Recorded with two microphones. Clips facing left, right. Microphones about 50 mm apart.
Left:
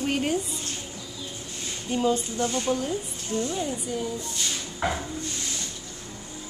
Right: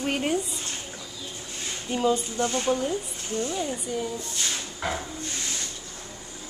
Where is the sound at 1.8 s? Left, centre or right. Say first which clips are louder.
Even; centre.